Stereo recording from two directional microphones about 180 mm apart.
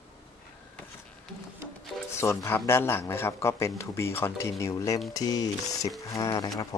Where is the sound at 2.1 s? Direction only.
15° left (ahead or behind).